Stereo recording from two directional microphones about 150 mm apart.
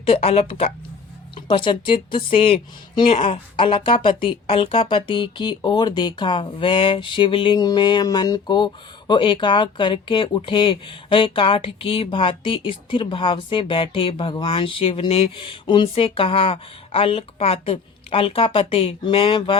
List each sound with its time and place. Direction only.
0.0 s speech: 40° left (ahead or behind)